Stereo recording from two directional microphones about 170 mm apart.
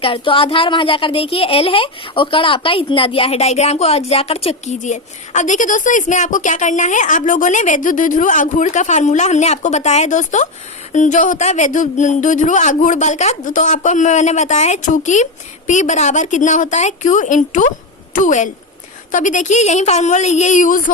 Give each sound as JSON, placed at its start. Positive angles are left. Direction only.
{"t": 0.0, "sound": "a woman's voice", "side_deg": 30}